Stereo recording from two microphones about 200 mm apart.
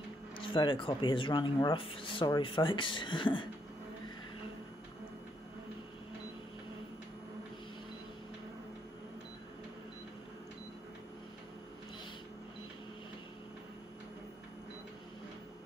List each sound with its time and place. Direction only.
0.4 s speech: 25° left (ahead or behind)